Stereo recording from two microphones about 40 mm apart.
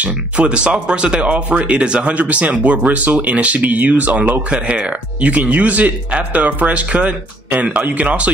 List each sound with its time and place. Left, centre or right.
0.5 s speech: right
2.1 s speech: right
4.5 s speech: right